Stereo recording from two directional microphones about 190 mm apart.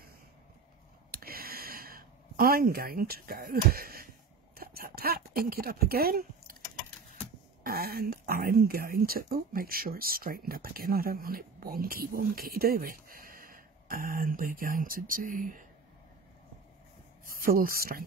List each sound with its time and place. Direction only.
1.1 s a sound: 50° right (ahead or behind)
7.6 s speech: 50° right (ahead or behind)
17.3 s speech: 50° right (ahead or behind)